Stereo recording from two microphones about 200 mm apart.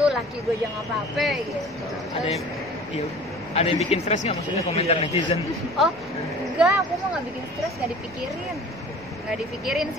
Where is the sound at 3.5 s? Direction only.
30° left (ahead or behind).